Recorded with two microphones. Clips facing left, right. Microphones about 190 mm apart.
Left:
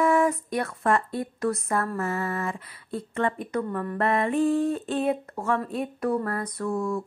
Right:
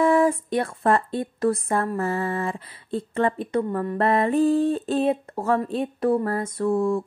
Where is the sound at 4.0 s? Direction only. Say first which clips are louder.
Right 3 dB; 35° right (ahead or behind).